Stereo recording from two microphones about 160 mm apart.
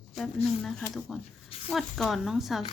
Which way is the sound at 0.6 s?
Centre (ahead or behind).